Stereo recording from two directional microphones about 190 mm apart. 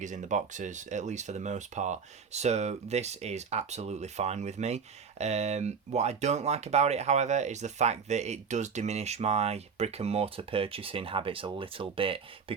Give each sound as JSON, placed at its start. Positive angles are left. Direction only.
{"t": 0.0, "sound": "speech", "side_deg": -40}